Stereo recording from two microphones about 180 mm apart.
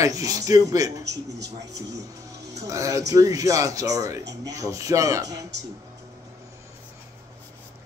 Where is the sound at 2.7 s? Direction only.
20° right (ahead or behind).